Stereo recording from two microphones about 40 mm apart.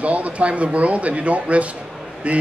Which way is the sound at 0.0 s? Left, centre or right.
Right.